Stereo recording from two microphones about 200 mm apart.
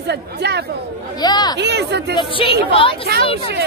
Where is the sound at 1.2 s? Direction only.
20° left (ahead or behind).